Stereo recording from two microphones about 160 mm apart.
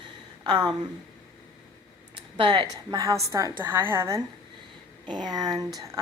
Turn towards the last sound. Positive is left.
turn(degrees=-20)  # may be behind; listen again after turning